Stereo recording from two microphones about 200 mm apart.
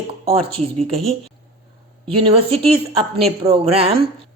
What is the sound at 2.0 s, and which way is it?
A woman's voice, 30° right (ahead or behind).